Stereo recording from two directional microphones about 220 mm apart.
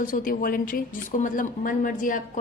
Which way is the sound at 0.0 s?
40° left (ahead or behind).